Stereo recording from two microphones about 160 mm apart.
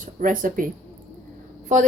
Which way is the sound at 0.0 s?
55° right (ahead or behind).